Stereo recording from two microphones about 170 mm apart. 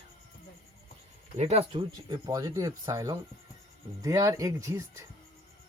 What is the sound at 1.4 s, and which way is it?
Speech, 35° right (ahead or behind).